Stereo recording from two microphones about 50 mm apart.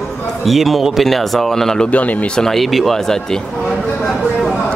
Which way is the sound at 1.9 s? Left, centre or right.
Left.